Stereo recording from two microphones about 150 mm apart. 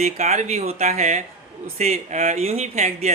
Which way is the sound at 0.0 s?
50° right (ahead or behind).